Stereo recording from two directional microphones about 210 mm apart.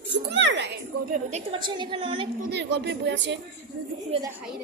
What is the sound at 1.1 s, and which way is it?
Speech, 35° right (ahead or behind).